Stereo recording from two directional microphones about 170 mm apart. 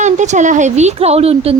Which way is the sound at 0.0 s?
45° right (ahead or behind).